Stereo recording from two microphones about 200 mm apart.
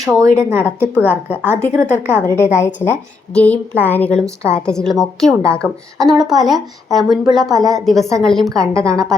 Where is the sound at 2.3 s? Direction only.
15° left (ahead or behind).